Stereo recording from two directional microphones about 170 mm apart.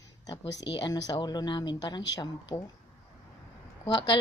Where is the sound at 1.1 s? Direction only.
25° left (ahead or behind).